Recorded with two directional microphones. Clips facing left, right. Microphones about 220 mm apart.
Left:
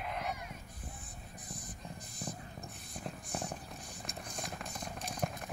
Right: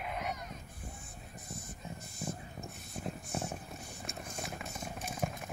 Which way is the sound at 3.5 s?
Centre (ahead or behind).